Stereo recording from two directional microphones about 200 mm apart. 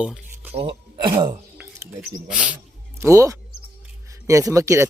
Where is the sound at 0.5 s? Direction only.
25° right (ahead or behind).